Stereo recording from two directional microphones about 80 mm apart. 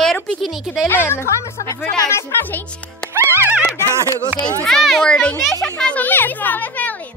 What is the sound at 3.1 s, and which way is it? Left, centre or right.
Music, right.